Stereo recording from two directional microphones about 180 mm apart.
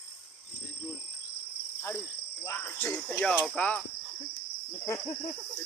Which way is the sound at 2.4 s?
10° left (ahead or behind).